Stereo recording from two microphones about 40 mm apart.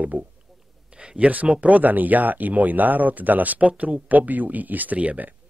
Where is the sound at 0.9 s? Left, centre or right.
Right.